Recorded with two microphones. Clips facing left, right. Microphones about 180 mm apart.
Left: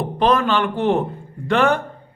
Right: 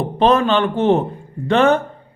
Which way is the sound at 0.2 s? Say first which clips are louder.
Right 3 dB; 25° right (ahead or behind).